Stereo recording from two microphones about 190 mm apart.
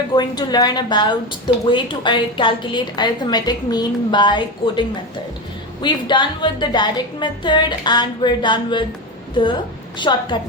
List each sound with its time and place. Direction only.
0.1 s a woman's voice: 20° left (ahead or behind)